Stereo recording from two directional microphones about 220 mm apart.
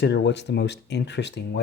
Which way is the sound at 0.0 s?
50° left (ahead or behind).